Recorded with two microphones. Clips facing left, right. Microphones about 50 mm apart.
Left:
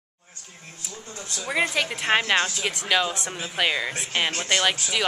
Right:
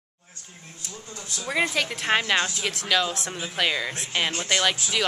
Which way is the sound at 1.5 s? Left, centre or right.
Centre.